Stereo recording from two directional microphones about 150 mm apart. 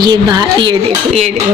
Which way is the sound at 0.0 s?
25° right (ahead or behind).